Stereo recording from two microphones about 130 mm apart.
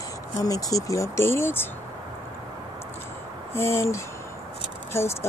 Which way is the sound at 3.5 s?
20° left (ahead or behind).